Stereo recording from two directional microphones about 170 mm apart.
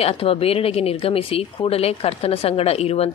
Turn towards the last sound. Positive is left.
turn(degrees=35)  # may be behind; listen again after turning